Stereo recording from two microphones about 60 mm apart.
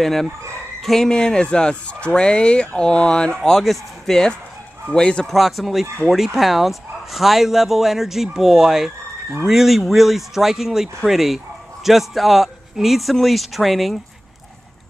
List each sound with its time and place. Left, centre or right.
0.0 s speech: centre
3.4 s speech: centre
5.2 s speech: centre